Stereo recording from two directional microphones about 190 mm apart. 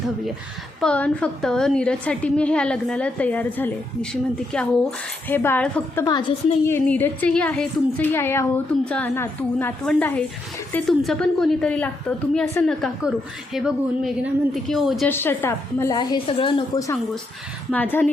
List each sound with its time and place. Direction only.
0.8 s a woman's voice: 5° left (ahead or behind)
6.1 s a woman's voice: 20° left (ahead or behind)
6.7 s a woman's voice: 10° left (ahead or behind)
15.1 s a woman's voice: 10° left (ahead or behind)